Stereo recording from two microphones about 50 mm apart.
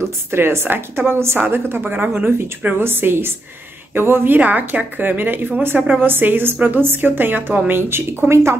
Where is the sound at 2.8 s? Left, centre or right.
Right.